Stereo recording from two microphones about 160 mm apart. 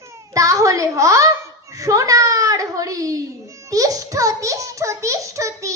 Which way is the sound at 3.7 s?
20° right (ahead or behind).